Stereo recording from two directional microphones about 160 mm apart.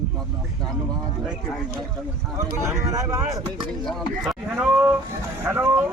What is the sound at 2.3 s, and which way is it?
Speech, 20° right (ahead or behind).